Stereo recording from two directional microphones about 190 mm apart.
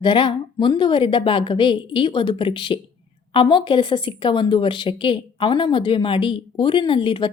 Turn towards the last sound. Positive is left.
turn(degrees=25)  # may be behind; listen again after turning